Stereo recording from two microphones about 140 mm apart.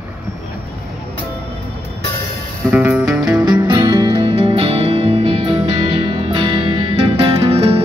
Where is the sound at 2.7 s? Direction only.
15° right (ahead or behind).